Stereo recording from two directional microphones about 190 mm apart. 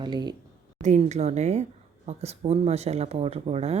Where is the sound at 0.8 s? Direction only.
35° right (ahead or behind).